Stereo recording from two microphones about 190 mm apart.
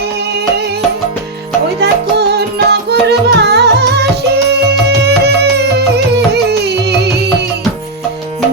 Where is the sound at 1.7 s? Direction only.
60° right (ahead or behind).